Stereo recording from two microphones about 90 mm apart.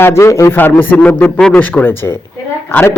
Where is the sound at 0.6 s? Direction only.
20° left (ahead or behind).